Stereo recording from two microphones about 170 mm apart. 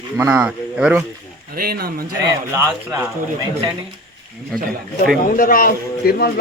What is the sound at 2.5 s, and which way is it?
Speech, 15° right (ahead or behind).